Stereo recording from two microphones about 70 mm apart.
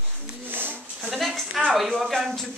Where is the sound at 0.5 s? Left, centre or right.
Right.